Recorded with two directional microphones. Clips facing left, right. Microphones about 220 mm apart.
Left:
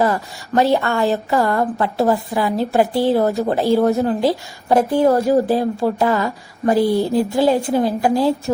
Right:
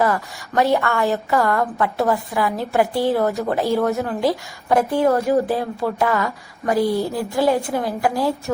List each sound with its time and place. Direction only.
0.0 s a woman's voice: 30° left (ahead or behind)
6.8 s a woman's voice: centre (ahead or behind)
7.1 s a woman's voice: 25° left (ahead or behind)